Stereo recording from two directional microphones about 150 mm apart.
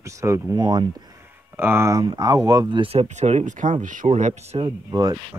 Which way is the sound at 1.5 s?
15° right (ahead or behind).